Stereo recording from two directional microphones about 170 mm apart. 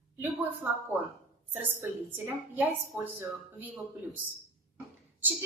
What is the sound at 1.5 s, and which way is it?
A woman's voice, 10° right (ahead or behind).